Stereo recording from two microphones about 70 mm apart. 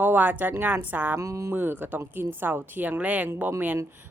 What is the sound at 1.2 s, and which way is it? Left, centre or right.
Speech, right.